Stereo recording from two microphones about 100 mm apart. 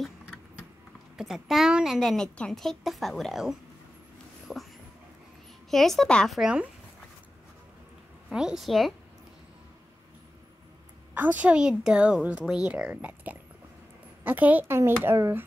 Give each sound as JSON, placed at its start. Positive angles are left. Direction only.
{"t": 1.1, "sound": "a woman's voice", "side_deg": -5}
{"t": 4.5, "sound": "a sound", "side_deg": 0}
{"t": 5.7, "sound": "a woman's voice", "side_deg": 0}
{"t": 6.3, "sound": "a woman's voice", "side_deg": -10}
{"t": 8.3, "sound": "a woman's voice", "side_deg": -5}
{"t": 11.1, "sound": "a woman's voice", "side_deg": -15}